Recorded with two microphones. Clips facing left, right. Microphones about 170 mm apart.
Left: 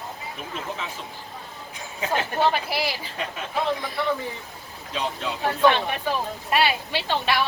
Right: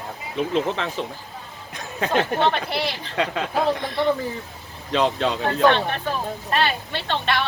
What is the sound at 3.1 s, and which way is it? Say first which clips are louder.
Speech: right 8 dB; 75° right (ahead or behind).